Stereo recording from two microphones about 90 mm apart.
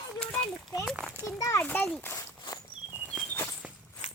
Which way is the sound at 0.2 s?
10° left (ahead or behind).